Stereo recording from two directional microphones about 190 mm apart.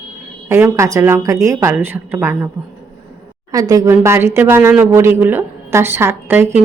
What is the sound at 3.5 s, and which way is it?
A woman's voice, 20° right (ahead or behind).